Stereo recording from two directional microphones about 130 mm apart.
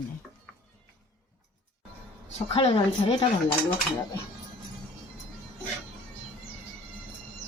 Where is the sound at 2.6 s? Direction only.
50° left (ahead or behind).